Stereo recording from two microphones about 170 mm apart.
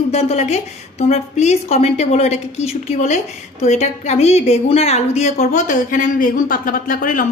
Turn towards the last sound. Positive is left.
turn(degrees=50)  # may be behind; listen again after turning